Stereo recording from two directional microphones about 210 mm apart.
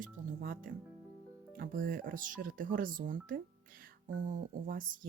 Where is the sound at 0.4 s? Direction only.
45° right (ahead or behind).